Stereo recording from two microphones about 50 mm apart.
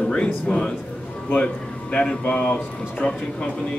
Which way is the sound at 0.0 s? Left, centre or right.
Centre.